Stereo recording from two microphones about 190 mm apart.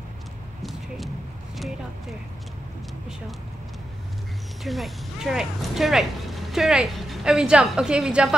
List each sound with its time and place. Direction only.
0.6 s clip-clop: centre (ahead or behind)
4.6 s speech: centre (ahead or behind)